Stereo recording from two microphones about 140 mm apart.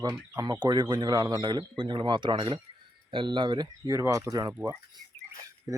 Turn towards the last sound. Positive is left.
turn(degrees=-20)  # may be behind; listen again after turning